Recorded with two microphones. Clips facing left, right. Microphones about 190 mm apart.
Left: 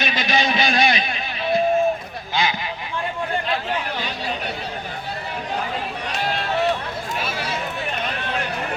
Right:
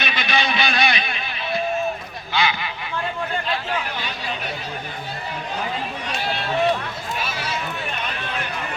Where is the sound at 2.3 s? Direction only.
45° left (ahead or behind).